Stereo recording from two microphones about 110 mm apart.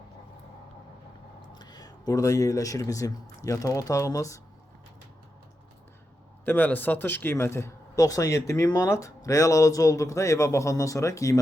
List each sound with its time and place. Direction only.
1.5 s speech: 40° left (ahead or behind)
6.4 s speech: 15° left (ahead or behind)